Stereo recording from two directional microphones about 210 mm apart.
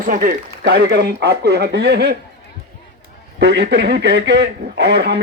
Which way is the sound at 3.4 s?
55° right (ahead or behind).